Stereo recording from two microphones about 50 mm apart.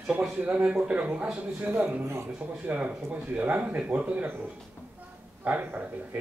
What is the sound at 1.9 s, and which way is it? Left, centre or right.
Speech, right.